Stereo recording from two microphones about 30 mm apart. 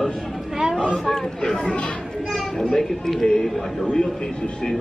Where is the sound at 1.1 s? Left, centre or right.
Centre.